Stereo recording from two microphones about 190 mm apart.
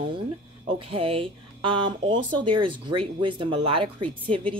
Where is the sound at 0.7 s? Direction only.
30° right (ahead or behind).